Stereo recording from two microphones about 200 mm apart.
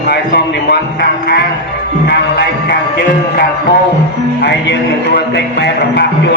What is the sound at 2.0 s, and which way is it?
Music, 55° left (ahead or behind).